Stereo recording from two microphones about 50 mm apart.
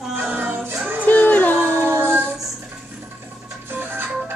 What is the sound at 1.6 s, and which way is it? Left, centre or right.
Child singing, right.